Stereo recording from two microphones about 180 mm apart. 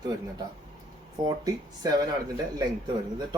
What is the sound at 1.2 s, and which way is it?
Speech, 20° right (ahead or behind).